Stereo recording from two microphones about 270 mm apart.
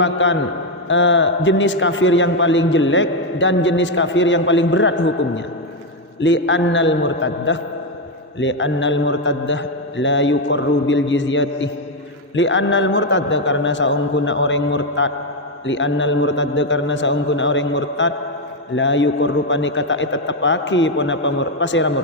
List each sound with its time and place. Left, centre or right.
0.0 s a man's voice: left